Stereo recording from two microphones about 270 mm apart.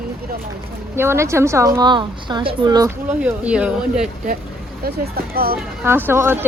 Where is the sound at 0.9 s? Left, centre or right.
Centre.